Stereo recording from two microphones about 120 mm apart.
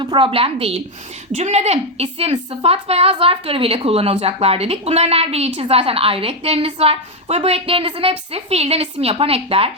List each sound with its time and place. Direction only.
0.0 s a woman's voice: 45° right (ahead or behind)
1.3 s a woman's voice: 65° right (ahead or behind)